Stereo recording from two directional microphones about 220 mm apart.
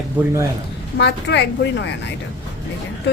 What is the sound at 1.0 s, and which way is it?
Speech, 50° left (ahead or behind).